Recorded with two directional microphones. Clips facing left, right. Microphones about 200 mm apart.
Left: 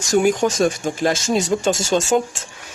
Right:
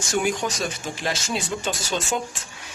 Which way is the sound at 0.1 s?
45° left (ahead or behind).